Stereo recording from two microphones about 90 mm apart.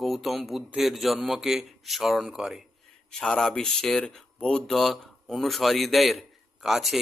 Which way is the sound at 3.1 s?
5° left (ahead or behind).